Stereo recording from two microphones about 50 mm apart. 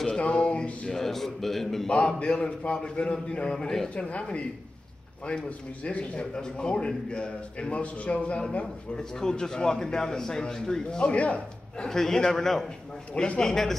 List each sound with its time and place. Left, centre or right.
0.2 s a sound: left
0.8 s a man's voice: centre
1.9 s a man's voice: left
3.9 s a man's voice: left
5.9 s a man's voice: left
11.1 s speech: left
11.9 s a man's voice: centre